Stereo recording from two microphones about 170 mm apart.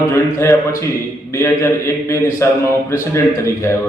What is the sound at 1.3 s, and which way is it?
A man's voice, 15° left (ahead or behind).